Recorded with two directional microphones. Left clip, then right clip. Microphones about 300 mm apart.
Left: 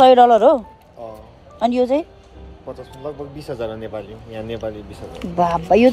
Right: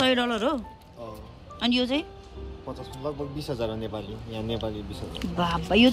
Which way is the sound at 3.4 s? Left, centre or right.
Right.